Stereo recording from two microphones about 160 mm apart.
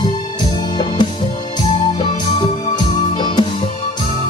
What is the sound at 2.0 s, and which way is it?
Music, 30° left (ahead or behind).